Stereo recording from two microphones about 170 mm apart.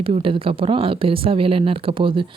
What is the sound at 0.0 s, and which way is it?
A woman's voice, 30° right (ahead or behind).